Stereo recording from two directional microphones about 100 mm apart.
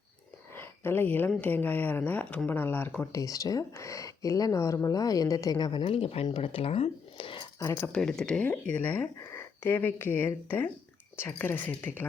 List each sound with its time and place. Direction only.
0.5 s a sound: 25° left (ahead or behind)
1.4 s speech: 20° left (ahead or behind)
3.1 s speech: 35° left (ahead or behind)
5.8 s speech: 70° left (ahead or behind)
6.3 s speech: 65° left (ahead or behind)
7.6 s speech: 30° left (ahead or behind)
7.9 s speech: 5° left (ahead or behind)